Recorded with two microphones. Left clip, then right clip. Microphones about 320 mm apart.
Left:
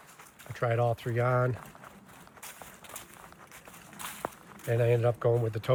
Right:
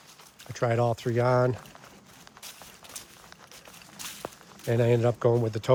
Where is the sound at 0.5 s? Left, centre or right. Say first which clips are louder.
Right 3 dB; centre.